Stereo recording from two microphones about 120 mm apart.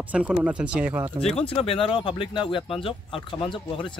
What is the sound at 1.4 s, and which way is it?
Speech, 55° left (ahead or behind).